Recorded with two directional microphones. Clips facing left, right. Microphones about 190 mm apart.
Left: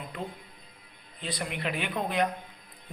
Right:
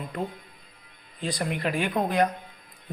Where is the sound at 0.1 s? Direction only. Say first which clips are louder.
Right 7 dB; 45° right (ahead or behind).